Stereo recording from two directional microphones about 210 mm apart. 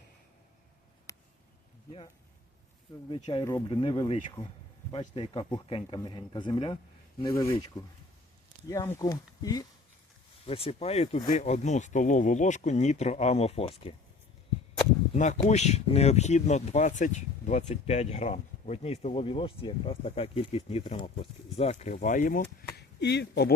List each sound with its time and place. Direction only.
1.1 s a sound: 15° left (ahead or behind)
3.1 s speech: 25° left (ahead or behind)
15.1 s speech: 35° left (ahead or behind); by 23.6 s 50° left (ahead or behind)